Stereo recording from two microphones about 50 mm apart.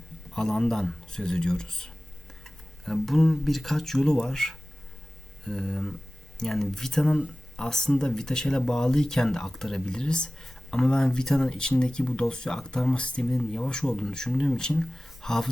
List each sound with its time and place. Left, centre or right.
0.3 s speech: centre